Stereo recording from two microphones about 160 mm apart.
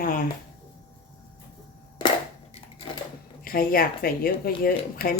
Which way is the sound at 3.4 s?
65° left (ahead or behind).